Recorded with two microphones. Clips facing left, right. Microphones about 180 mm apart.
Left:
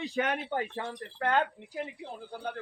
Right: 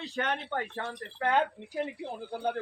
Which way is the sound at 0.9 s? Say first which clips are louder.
Right 1 dB; centre (ahead or behind).